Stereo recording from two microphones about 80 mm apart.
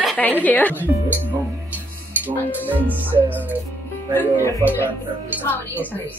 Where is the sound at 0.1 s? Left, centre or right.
Left.